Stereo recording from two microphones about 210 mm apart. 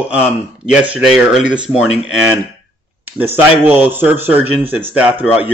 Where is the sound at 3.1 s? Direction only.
10° right (ahead or behind).